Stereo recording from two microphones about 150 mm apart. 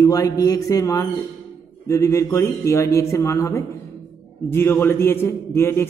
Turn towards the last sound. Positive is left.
turn(degrees=15)  # may be behind; listen again after turning